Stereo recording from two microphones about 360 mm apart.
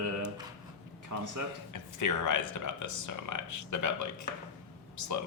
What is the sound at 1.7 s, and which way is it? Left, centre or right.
Speech, left.